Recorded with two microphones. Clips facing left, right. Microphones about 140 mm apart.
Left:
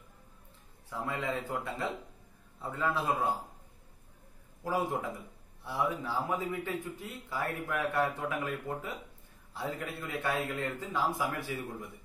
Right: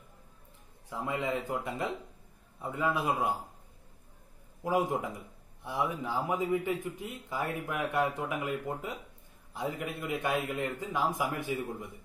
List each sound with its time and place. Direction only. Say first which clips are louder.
0.8 s speech: right 2 dB; 15° right (ahead or behind)
4.6 s speech: right 3 dB; 15° right (ahead or behind)